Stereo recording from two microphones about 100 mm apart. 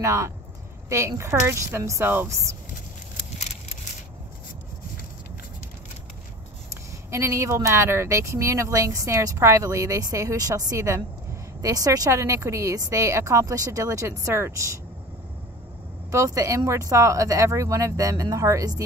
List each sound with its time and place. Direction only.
0.0 s speech: 30° right (ahead or behind)
6.7 s speech: 25° right (ahead or behind)
16.1 s speech: 30° right (ahead or behind)